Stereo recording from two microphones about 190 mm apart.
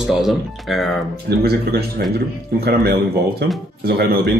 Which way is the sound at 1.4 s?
55° right (ahead or behind).